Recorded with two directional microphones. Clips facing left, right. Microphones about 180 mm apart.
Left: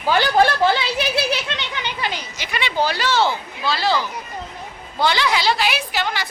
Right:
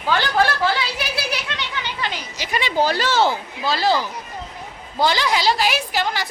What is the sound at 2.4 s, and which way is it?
A woman's voice, 40° right (ahead or behind).